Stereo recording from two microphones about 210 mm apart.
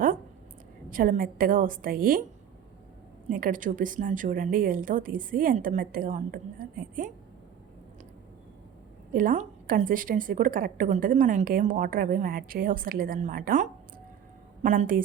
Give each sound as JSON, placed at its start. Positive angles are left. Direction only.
{"t": 0.9, "sound": "a woman's voice", "side_deg": -40}
{"t": 3.2, "sound": "a woman's voice", "side_deg": -40}
{"t": 9.1, "sound": "a woman's voice", "side_deg": -40}